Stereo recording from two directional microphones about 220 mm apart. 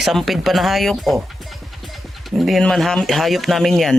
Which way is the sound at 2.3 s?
Centre (ahead or behind).